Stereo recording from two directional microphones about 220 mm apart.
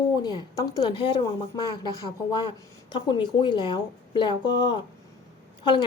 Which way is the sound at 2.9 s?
20° left (ahead or behind).